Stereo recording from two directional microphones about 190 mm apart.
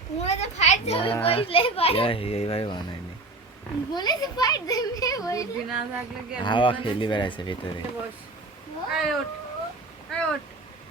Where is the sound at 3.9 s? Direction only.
20° left (ahead or behind).